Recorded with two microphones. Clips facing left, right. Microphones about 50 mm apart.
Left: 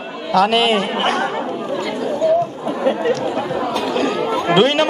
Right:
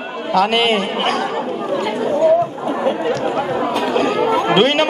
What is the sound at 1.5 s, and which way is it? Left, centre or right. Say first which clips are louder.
Chatter: right 2 dB; right.